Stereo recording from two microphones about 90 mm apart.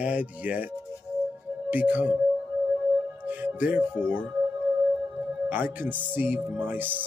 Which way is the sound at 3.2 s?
20° right (ahead or behind).